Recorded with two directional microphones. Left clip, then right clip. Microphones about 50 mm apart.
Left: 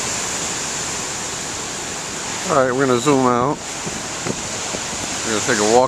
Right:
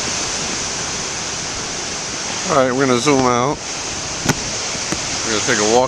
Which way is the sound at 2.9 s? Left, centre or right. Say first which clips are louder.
Right 1 dB; left.